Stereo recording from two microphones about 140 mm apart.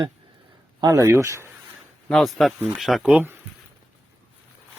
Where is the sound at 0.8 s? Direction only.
25° right (ahead or behind).